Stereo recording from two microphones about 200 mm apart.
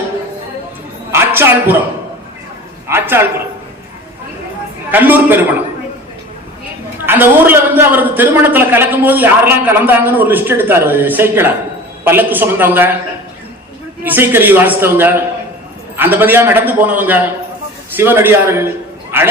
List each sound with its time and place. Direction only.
1.1 s a sound: 10° right (ahead or behind)
2.9 s a man's voice: 10° right (ahead or behind)
4.9 s a man's voice: 10° right (ahead or behind)
7.0 s a man's voice: 10° right (ahead or behind)
14.0 s a man's voice: 10° right (ahead or behind)